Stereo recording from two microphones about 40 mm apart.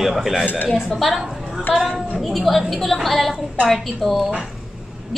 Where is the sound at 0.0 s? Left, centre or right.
Centre.